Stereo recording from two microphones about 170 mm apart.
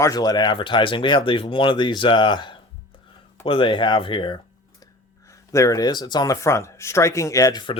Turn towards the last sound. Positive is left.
turn(degrees=25)  # may be behind; listen again after turning